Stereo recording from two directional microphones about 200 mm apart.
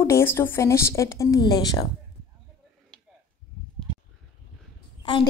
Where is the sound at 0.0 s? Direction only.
10° left (ahead or behind).